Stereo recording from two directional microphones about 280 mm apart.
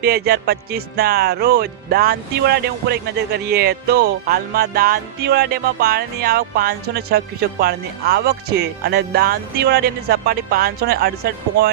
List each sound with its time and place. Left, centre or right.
0.0 s speech: right